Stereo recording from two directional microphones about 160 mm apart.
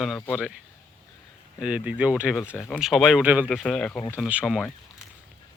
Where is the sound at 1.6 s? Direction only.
5° right (ahead or behind).